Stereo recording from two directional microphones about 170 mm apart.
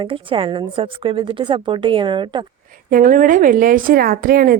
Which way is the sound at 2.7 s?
55° right (ahead or behind).